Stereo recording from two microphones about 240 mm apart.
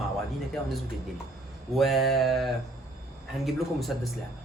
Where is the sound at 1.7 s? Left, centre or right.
Centre.